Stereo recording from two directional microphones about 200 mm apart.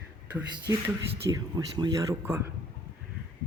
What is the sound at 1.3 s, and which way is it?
Speech, 20° right (ahead or behind).